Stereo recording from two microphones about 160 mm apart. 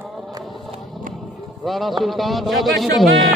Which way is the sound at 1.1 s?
Centre (ahead or behind).